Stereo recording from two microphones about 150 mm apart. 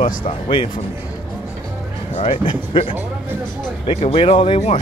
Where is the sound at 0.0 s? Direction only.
35° left (ahead or behind).